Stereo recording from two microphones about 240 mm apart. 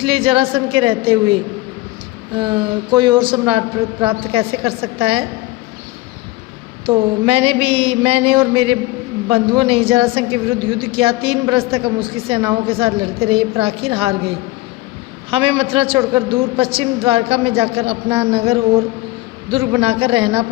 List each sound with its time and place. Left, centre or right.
0.0 s a woman's voice: right
6.8 s a woman's voice: right